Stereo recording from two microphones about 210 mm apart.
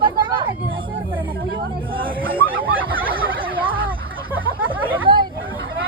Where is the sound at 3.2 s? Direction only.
25° right (ahead or behind).